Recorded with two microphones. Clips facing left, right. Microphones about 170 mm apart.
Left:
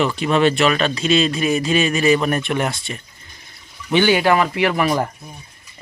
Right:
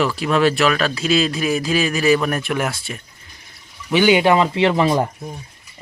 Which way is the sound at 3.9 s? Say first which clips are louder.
Right 1 dB; 15° right (ahead or behind).